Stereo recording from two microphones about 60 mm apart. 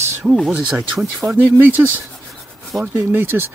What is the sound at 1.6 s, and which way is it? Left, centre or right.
Speech, right.